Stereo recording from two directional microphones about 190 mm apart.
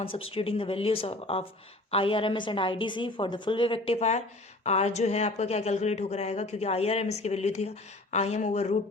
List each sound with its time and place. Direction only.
0.3 s a woman's voice: 30° left (ahead or behind)